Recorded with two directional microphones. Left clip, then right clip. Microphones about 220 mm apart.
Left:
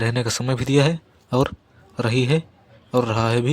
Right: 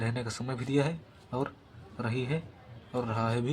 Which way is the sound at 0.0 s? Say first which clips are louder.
Left 12 dB; 45° left (ahead or behind).